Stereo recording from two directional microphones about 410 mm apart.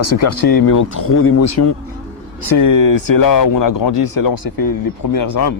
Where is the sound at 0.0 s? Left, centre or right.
Left.